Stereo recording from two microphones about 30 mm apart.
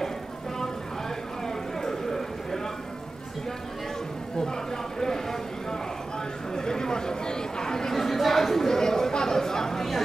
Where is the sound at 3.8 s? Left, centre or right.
Centre.